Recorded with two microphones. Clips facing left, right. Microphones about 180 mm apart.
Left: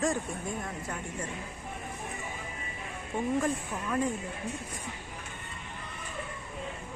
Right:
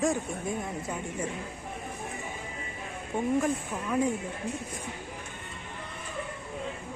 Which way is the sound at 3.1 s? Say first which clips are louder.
Right 2 dB; 15° right (ahead or behind).